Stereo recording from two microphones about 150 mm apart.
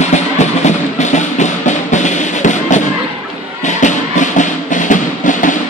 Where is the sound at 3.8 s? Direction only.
55° left (ahead or behind).